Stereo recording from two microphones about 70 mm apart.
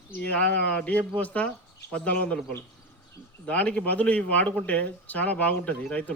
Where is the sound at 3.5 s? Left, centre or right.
Centre.